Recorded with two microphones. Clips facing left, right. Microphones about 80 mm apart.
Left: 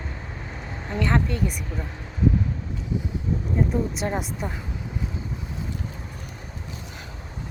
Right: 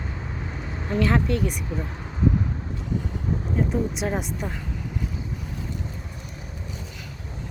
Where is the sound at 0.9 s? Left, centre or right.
Centre.